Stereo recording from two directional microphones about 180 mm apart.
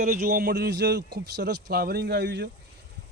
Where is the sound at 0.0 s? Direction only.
50° right (ahead or behind).